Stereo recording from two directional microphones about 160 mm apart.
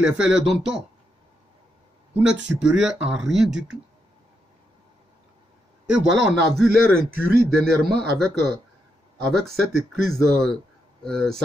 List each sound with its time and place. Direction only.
0.0 s speech: 5° right (ahead or behind)
2.4 s speech: 5° right (ahead or behind)
5.9 s speech: centre (ahead or behind)
7.1 s speech: 70° right (ahead or behind)
7.8 s speech: centre (ahead or behind)